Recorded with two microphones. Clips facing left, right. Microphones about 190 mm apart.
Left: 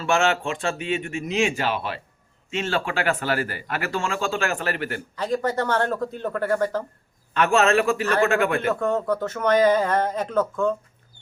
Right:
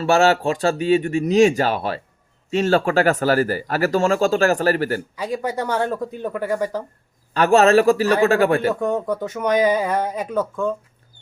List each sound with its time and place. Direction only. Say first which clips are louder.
0.0 s speech: right 6 dB; 35° right (ahead or behind)
5.1 s speech: even; 10° right (ahead or behind)
7.3 s speech: right 5 dB; 35° right (ahead or behind)
8.7 s speech: right 1 dB; 15° right (ahead or behind)